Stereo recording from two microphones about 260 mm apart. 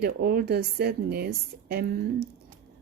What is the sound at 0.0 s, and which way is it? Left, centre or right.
Speech, right.